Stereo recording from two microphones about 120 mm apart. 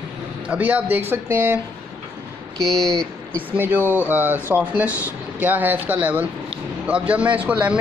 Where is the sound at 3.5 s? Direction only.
15° right (ahead or behind).